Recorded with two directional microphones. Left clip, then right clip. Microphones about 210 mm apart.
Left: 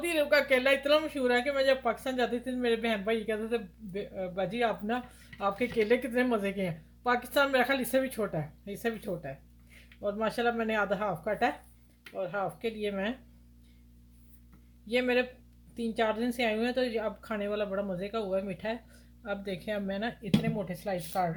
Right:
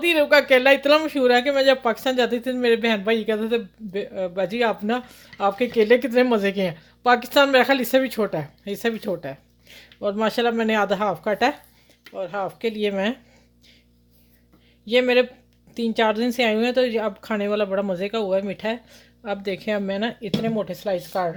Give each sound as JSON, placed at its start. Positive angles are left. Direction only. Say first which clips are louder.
{"t": 0.0, "sound": "speech", "louder": "right 10 dB", "side_deg": -50}
{"t": 14.8, "sound": "speech", "louder": "right 10 dB", "side_deg": -45}